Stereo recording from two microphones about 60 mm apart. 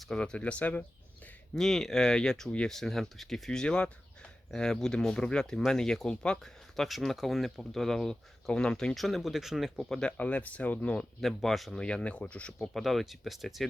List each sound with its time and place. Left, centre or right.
0.2 s speech: centre
1.5 s speech: centre
9.0 s speech: centre
9.9 s speech: centre
10.2 s speech: left
11.2 s speech: centre
11.8 s speech: centre
12.6 s speech: centre